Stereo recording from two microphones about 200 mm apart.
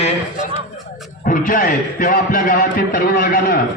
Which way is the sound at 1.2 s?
45° left (ahead or behind).